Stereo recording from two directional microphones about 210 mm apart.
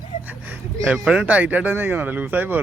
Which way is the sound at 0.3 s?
10° right (ahead or behind).